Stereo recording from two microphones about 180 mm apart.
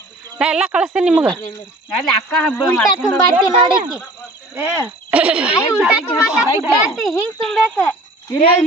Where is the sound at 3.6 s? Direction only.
25° right (ahead or behind).